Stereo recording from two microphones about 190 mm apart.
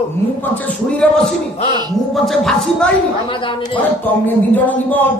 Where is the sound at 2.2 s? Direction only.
Centre (ahead or behind).